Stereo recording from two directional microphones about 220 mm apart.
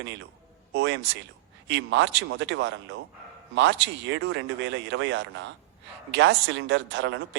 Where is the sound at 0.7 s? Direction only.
55° right (ahead or behind).